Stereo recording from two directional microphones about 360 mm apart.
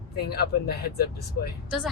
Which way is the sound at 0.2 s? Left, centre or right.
Left.